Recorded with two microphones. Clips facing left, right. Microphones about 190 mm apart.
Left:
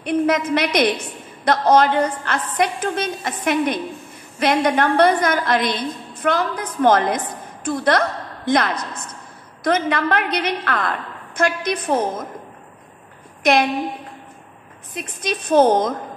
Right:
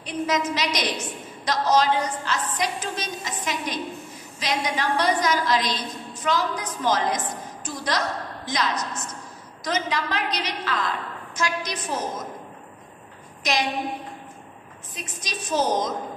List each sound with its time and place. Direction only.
0.0 s a woman's voice: 55° left (ahead or behind)
13.4 s a woman's voice: 55° left (ahead or behind)
15.0 s a woman's voice: 55° left (ahead or behind)